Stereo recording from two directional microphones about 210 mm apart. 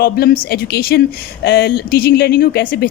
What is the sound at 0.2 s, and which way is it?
Speech, 45° left (ahead or behind).